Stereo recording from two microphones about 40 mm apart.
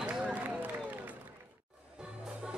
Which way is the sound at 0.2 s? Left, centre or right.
Right.